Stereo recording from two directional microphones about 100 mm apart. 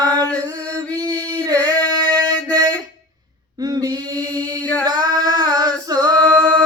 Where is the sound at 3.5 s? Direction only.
40° right (ahead or behind).